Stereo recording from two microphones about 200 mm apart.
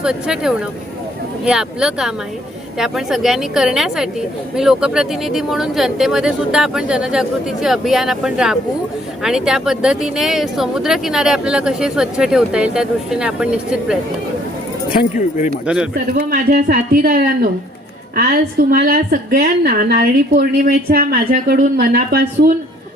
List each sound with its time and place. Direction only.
0.0 s speech: 5° right (ahead or behind)
15.6 s speech: 5° right (ahead or behind)
16.1 s a woman's voice: 45° right (ahead or behind)
18.7 s a woman's voice: 50° right (ahead or behind)